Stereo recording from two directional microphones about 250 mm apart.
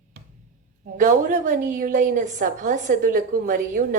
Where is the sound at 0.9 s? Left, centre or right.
Right.